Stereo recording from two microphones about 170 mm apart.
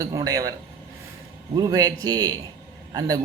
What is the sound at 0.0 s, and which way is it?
Speech, 20° right (ahead or behind).